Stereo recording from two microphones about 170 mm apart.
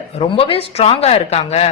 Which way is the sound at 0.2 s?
35° left (ahead or behind).